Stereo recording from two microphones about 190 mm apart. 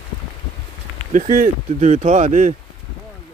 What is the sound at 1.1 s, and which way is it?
Speech, 45° right (ahead or behind).